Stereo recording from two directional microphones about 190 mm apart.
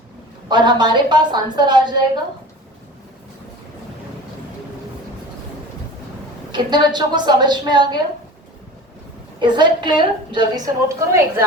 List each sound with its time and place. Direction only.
0.4 s a woman's voice: 25° right (ahead or behind)
6.5 s a woman's voice: 25° right (ahead or behind)
9.4 s a woman's voice: 25° right (ahead or behind)